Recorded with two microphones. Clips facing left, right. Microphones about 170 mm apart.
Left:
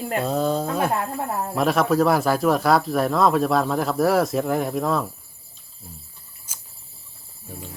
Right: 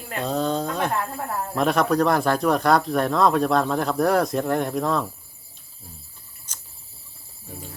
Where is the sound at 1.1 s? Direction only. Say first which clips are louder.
Left 2 dB; 20° left (ahead or behind).